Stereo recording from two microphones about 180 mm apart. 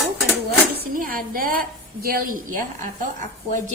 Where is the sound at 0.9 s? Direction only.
50° right (ahead or behind).